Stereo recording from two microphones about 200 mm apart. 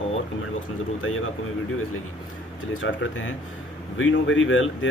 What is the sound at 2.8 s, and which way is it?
Speech, 75° left (ahead or behind).